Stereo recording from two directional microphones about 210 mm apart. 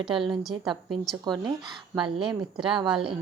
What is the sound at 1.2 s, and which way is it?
A woman's voice, 20° right (ahead or behind).